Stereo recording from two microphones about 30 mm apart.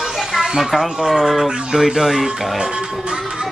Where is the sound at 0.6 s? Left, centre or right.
Centre.